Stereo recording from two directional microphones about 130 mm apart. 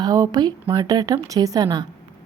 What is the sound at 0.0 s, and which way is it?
Speech, 30° right (ahead or behind).